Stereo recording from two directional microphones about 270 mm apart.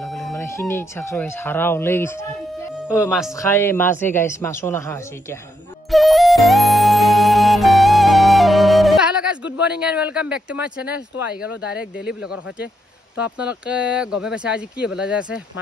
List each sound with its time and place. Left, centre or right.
0.0 s a sound: centre
0.3 s a woman's voice: centre
3.1 s speech: centre
3.3 s a woman's voice: centre
5.9 s music: centre
13.2 s speech: centre